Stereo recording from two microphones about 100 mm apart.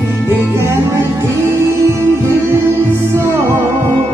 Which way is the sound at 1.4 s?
25° right (ahead or behind).